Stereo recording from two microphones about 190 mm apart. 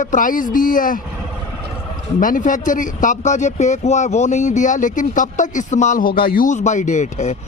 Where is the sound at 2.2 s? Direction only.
45° left (ahead or behind).